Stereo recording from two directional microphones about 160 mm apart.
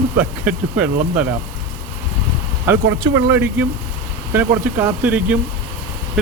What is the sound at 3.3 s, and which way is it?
Speech, 10° right (ahead or behind).